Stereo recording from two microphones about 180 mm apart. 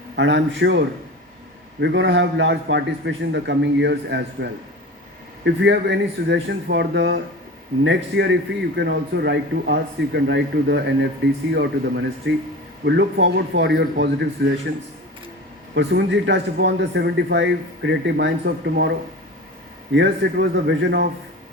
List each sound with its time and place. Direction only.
0.2 s speech: 80° right
1.8 s speech: 80° right
5.5 s speech: 75° right (ahead or behind)
15.7 s speech: 75° right (ahead or behind)
19.9 s speech: 80° right